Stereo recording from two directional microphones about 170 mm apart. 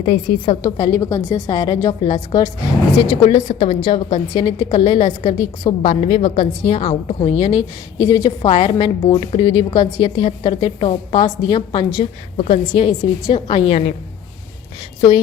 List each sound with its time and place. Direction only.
0.0 s a woman's voice: 35° left (ahead or behind)
0.6 s a woman's voice: 20° left (ahead or behind); by 13.9 s 40° left (ahead or behind)